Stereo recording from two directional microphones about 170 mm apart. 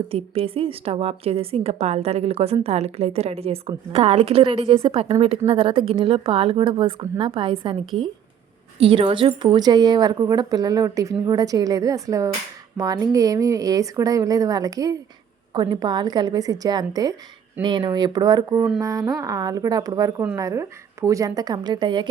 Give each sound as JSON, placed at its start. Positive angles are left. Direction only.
{"t": 0.1, "sound": "a woman's voice", "side_deg": -35}
{"t": 8.8, "sound": "a woman's voice", "side_deg": -35}